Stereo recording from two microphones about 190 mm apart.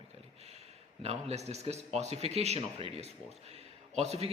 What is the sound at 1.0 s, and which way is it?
A man's voice, 35° right (ahead or behind).